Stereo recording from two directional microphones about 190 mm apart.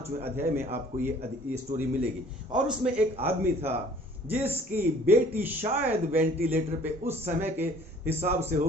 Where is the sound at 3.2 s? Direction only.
10° right (ahead or behind).